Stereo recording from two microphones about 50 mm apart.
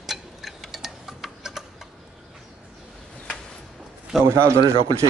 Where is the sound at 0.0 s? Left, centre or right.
Centre.